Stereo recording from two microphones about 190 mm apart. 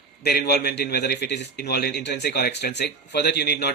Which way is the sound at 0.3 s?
60° left (ahead or behind).